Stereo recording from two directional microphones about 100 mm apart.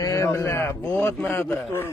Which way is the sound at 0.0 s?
30° left (ahead or behind).